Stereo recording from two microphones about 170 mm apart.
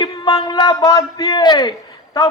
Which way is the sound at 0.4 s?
25° left (ahead or behind).